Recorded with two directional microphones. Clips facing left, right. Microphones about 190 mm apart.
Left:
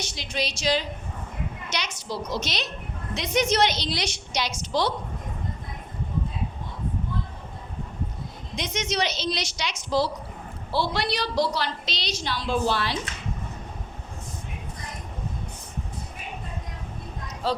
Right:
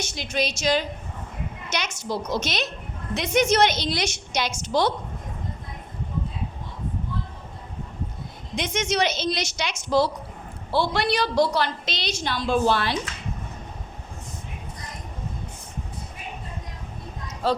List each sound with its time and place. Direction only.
0.2 s a woman's voice: 50° right (ahead or behind)
8.5 s a woman's voice: 55° right (ahead or behind)
17.4 s speech: 55° right (ahead or behind)